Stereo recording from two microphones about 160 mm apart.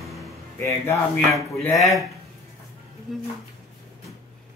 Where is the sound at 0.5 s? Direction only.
15° left (ahead or behind).